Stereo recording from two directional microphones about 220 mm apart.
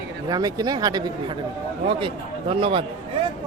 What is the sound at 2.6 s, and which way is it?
Speech, 25° right (ahead or behind).